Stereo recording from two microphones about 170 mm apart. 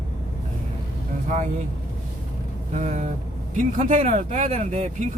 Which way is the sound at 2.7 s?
40° right (ahead or behind).